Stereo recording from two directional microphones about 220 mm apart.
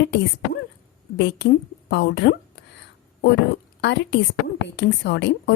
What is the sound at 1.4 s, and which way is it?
Speech, 50° left (ahead or behind).